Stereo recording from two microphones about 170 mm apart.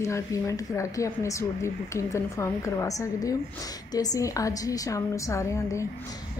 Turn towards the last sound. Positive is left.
turn(degrees=15)  # may be behind; listen again after turning